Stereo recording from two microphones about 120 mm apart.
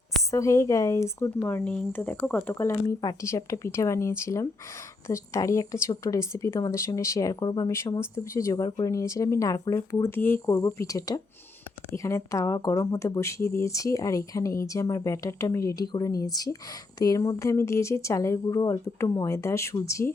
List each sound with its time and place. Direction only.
0.3 s speech: 25° left (ahead or behind)
2.5 s speech: 25° left (ahead or behind)
7.7 s speech: 20° left (ahead or behind)
10.1 s speech: 15° left (ahead or behind)